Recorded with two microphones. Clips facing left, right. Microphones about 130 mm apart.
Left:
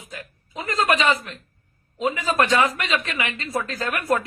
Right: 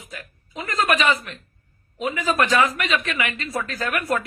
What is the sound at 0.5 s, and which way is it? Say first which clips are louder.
A woman's voice: even; 30° left (ahead or behind).